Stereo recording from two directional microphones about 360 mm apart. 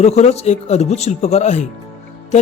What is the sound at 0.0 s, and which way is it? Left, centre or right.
Speech, centre.